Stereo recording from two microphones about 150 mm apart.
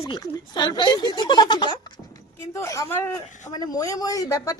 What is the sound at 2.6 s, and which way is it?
Speech, 20° left (ahead or behind).